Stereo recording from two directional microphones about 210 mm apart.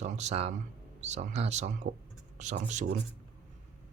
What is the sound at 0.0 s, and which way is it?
Speech, 30° right (ahead or behind).